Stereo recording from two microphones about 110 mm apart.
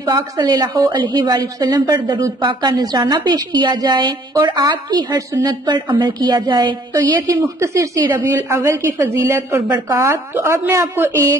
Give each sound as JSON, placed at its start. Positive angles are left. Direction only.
{"t": 0.0, "sound": "a woman's voice", "side_deg": -35}
{"t": 6.9, "sound": "a woman's voice", "side_deg": -30}